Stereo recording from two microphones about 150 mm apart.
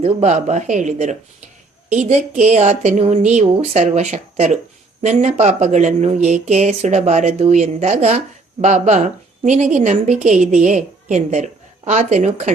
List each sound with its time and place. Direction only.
0.0 s speech: 50° right (ahead or behind)